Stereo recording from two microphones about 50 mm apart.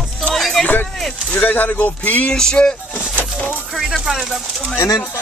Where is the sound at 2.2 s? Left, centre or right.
Centre.